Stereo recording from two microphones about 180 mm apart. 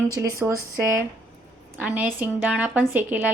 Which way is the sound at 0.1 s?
15° right (ahead or behind).